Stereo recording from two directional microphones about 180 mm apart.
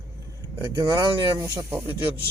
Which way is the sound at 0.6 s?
25° right (ahead or behind).